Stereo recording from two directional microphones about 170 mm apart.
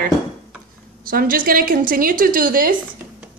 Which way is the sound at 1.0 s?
55° right (ahead or behind).